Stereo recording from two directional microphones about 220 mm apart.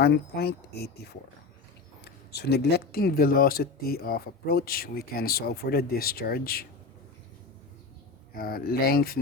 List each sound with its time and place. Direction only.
0.0 s speech: 45° left (ahead or behind)
8.3 s speech: 40° left (ahead or behind)